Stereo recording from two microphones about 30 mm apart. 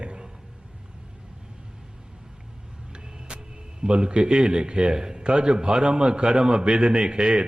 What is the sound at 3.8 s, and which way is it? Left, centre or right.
A man's voice, right.